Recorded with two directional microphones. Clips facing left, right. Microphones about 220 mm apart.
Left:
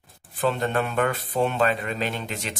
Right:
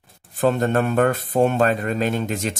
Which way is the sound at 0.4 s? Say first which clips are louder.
Right 5 dB; 45° right (ahead or behind).